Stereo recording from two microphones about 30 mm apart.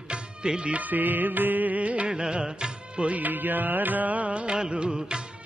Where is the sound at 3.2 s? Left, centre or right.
Right.